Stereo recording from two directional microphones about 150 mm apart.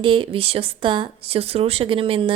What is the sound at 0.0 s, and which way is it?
Speech, 35° right (ahead or behind).